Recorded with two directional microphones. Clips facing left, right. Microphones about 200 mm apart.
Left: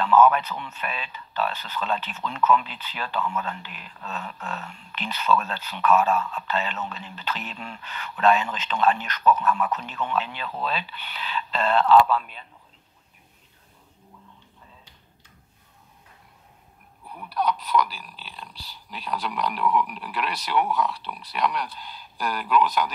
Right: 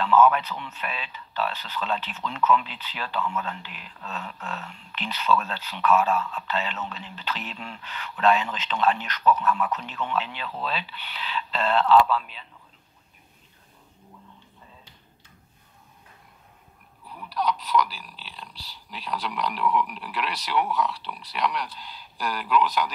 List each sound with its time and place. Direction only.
0.0 s speech: 45° left (ahead or behind)
17.1 s speech: 55° left (ahead or behind)